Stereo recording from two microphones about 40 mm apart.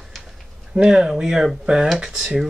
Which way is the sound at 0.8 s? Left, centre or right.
Centre.